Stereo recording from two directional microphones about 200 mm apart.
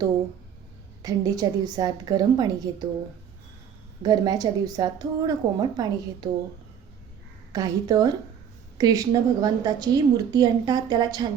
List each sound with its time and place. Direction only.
1.0 s a woman's voice: 20° right (ahead or behind)
4.0 s a woman's voice: 20° right (ahead or behind)
7.5 s a woman's voice: 20° right (ahead or behind)